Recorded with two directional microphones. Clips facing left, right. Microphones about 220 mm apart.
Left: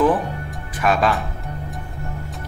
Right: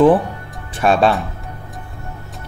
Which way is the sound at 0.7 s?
30° right (ahead or behind).